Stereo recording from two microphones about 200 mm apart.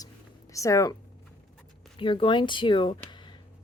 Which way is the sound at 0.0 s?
15° left (ahead or behind).